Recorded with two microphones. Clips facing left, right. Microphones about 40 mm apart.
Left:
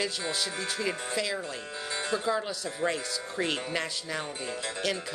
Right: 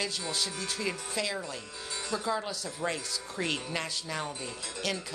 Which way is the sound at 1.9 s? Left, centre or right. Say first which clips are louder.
Left 4 dB; left.